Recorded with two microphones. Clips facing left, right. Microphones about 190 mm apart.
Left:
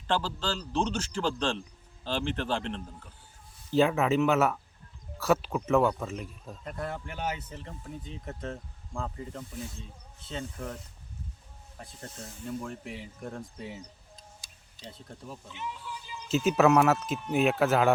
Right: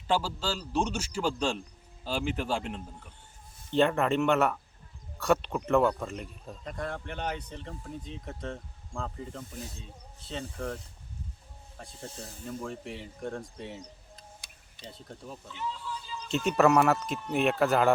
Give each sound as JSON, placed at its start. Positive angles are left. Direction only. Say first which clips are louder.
{"t": 0.1, "sound": "speech", "louder": "right 1 dB", "side_deg": -10}
{"t": 3.7, "sound": "speech", "louder": "left 1 dB", "side_deg": 0}
{"t": 11.8, "sound": "speech", "louder": "right 1 dB", "side_deg": 5}
{"t": 14.2, "sound": "tick-tock", "louder": "right 2 dB", "side_deg": -65}
{"t": 14.8, "sound": "speech", "louder": "even", "side_deg": 0}
{"t": 15.4, "sound": "music", "louder": "right 4 dB", "side_deg": 15}
{"t": 16.3, "sound": "speech", "louder": "left 1 dB", "side_deg": 0}